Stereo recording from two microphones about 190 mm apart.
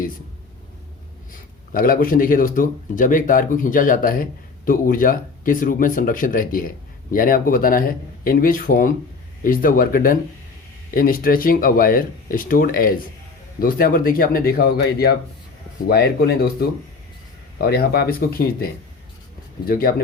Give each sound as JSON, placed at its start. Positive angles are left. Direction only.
{"t": 1.3, "sound": "speech", "side_deg": 50}